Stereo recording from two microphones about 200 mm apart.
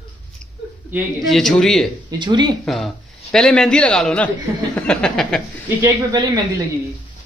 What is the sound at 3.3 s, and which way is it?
A man's voice, 5° left (ahead or behind).